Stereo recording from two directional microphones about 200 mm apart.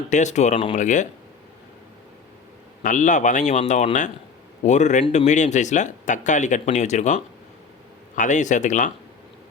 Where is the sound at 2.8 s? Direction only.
40° left (ahead or behind).